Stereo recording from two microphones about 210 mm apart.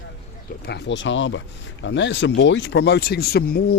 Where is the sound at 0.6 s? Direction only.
55° left (ahead or behind).